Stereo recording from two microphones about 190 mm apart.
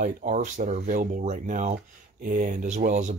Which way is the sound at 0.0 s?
40° right (ahead or behind).